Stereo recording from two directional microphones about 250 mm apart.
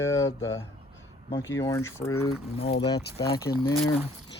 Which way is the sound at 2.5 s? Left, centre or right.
Left.